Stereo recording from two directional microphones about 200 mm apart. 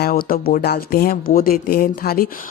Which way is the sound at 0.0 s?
45° left (ahead or behind).